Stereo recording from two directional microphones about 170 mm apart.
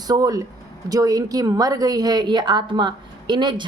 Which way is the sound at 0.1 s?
20° right (ahead or behind).